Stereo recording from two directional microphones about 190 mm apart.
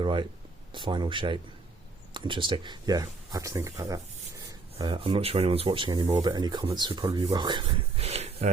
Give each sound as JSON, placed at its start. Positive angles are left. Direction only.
{"t": 0.0, "sound": "speech", "side_deg": -25}